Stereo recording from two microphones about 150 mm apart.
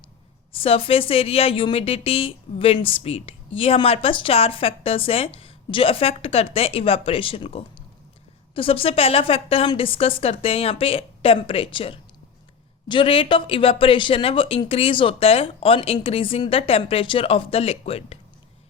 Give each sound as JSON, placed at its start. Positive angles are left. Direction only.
{"t": 0.5, "sound": "a woman's voice", "side_deg": 40}